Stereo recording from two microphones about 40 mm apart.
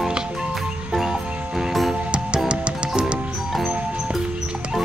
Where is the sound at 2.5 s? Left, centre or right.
Right.